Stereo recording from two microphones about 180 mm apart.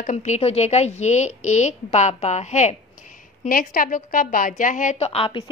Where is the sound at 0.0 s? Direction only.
40° left (ahead or behind).